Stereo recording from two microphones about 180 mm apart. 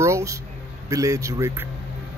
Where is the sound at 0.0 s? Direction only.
15° right (ahead or behind).